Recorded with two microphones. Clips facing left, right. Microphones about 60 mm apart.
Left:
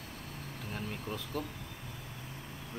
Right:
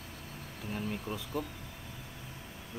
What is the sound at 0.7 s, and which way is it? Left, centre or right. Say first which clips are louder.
Speech: right 3 dB; centre.